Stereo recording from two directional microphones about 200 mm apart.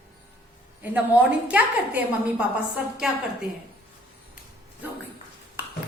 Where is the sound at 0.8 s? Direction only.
10° right (ahead or behind).